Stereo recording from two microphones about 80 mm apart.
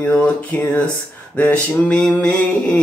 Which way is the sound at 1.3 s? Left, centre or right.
Centre.